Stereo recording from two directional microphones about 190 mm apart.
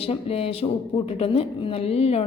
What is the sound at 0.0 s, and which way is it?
A woman's voice, 30° left (ahead or behind).